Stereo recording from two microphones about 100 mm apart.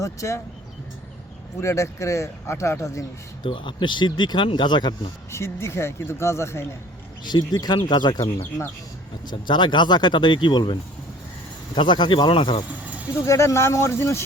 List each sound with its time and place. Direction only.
0.0 s speech: 30° left (ahead or behind)
1.6 s speech: 30° left (ahead or behind)
3.4 s speech: 55° left (ahead or behind)
5.3 s speech: 25° left (ahead or behind)
7.3 s speech: 45° left (ahead or behind)
8.4 s speech: 25° left (ahead or behind)
9.2 s speech: 50° left (ahead or behind)
13.2 s speech: 30° left (ahead or behind)